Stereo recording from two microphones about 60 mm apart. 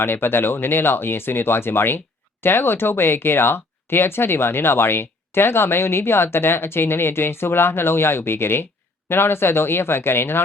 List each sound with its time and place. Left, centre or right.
0.0 s speech: left